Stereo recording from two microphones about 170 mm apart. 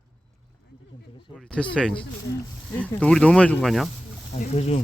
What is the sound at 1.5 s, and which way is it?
Speech, 5° left (ahead or behind).